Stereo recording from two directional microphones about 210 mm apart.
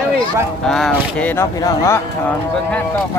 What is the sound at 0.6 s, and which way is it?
Speech, centre (ahead or behind).